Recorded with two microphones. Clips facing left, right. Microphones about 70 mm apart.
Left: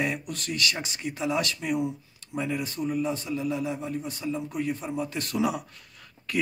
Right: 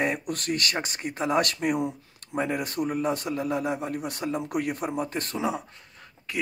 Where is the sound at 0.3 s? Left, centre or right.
Right.